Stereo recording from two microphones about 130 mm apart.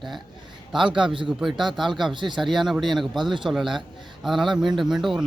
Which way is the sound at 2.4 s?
Centre (ahead or behind).